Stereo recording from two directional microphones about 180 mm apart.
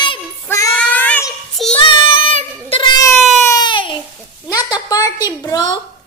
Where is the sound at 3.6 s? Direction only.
25° left (ahead or behind).